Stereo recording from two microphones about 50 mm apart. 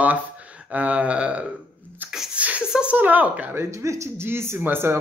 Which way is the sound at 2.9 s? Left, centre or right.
Right.